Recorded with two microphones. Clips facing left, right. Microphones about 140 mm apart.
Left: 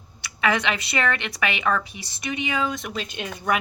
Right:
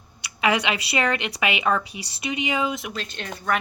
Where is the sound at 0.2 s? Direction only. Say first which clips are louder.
Right 1 dB; 15° right (ahead or behind).